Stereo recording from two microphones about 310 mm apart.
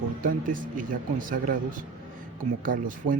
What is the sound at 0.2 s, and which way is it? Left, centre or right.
Speech, right.